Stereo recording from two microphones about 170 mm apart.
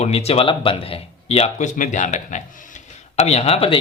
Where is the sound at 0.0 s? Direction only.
35° left (ahead or behind).